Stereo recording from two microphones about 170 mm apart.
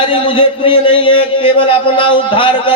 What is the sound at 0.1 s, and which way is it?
A man's voice, 30° left (ahead or behind).